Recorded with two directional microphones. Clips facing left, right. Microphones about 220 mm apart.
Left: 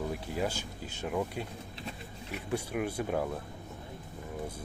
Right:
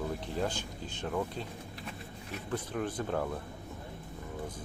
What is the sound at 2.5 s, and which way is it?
Speech, 10° left (ahead or behind).